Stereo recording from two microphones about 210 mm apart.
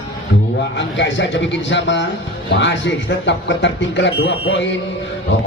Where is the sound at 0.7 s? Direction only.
60° left (ahead or behind).